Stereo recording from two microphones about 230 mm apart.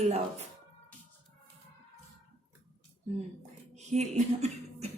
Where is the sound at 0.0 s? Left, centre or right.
Right.